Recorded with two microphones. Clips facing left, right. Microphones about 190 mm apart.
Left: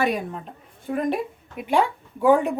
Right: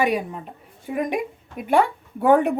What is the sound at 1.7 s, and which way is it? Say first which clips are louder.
Speech: right 2 dB; 60° right (ahead or behind).